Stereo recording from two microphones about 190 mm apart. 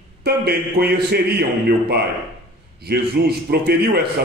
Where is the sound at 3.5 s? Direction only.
55° right (ahead or behind).